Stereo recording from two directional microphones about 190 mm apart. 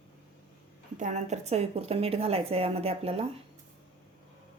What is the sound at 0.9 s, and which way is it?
Speech, 40° right (ahead or behind).